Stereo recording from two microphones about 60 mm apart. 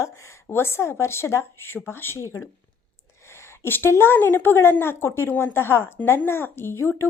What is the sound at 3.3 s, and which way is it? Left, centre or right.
A woman's voice, left.